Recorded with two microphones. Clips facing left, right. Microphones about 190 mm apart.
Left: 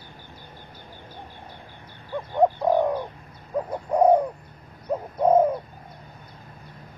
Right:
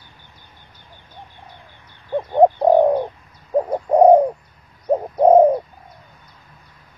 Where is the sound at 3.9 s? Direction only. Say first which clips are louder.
Right 7 dB; 30° right (ahead or behind).